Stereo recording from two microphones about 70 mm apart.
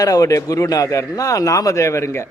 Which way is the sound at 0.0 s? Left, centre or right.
Left.